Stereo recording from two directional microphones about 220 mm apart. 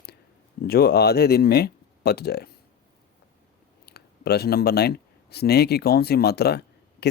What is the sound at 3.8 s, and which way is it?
Speech, 45° left (ahead or behind).